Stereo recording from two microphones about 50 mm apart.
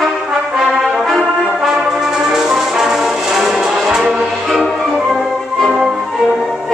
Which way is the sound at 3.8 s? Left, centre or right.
Centre.